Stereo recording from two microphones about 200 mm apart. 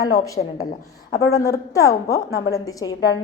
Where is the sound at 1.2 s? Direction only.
15° left (ahead or behind).